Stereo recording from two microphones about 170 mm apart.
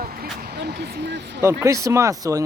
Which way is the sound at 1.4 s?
15° right (ahead or behind).